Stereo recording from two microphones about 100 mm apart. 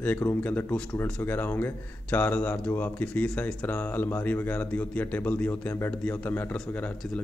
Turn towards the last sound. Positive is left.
turn(degrees=15)  # may be behind; listen again after turning